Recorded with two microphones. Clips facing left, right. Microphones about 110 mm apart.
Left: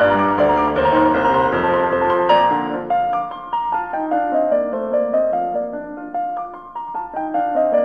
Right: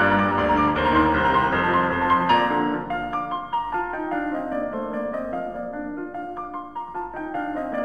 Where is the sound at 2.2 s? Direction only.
30° left (ahead or behind).